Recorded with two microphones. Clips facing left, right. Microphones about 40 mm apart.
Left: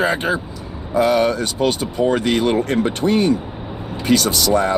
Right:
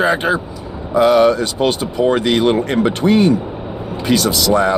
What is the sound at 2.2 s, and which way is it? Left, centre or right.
Speech, right.